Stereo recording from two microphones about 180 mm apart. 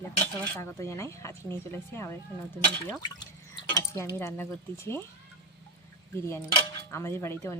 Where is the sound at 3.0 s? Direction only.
20° left (ahead or behind).